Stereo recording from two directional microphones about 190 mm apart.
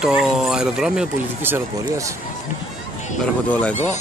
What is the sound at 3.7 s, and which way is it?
Speech, 35° left (ahead or behind).